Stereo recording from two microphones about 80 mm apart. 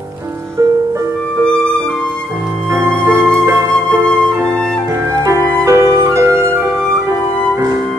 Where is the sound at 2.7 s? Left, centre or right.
Right.